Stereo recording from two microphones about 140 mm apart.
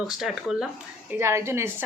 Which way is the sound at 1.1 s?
20° right (ahead or behind).